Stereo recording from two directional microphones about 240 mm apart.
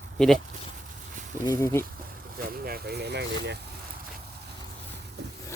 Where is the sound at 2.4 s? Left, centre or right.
Right.